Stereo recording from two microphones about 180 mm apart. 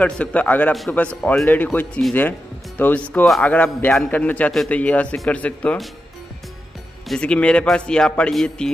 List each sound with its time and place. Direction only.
0.0 s a man's voice: 5° left (ahead or behind)
7.1 s a man's voice: 5° left (ahead or behind)